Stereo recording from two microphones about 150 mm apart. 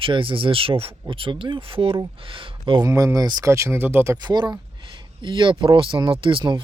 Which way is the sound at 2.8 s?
20° right (ahead or behind).